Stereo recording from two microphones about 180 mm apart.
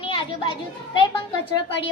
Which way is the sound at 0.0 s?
30° left (ahead or behind).